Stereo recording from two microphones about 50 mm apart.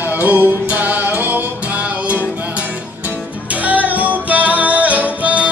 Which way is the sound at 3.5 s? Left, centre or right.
Right.